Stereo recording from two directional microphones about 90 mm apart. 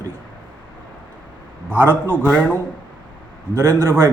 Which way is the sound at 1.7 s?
20° right (ahead or behind).